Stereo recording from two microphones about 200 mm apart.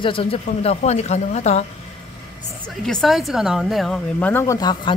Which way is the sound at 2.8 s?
Centre (ahead or behind).